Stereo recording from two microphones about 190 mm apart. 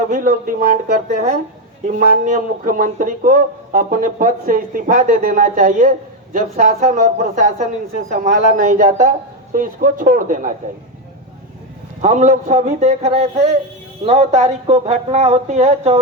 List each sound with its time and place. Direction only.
0.1 s speech: 45° right (ahead or behind)
12.0 s speech: 40° right (ahead or behind)